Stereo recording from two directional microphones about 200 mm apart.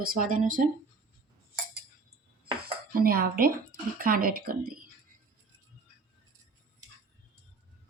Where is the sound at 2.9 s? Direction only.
45° right (ahead or behind).